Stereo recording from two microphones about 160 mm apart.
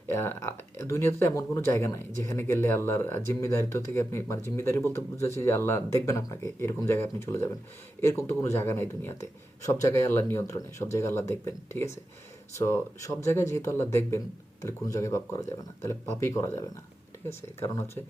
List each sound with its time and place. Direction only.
0.1 s speech: 15° left (ahead or behind)